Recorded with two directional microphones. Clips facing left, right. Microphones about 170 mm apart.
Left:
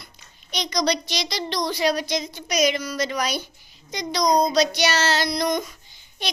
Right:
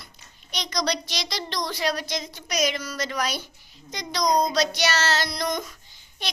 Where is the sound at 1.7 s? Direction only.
15° left (ahead or behind).